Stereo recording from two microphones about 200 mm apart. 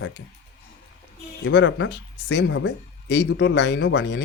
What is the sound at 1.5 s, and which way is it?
Speech, 65° left (ahead or behind).